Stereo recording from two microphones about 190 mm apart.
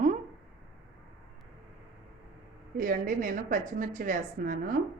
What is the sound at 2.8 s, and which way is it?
A woman's voice, 45° right (ahead or behind).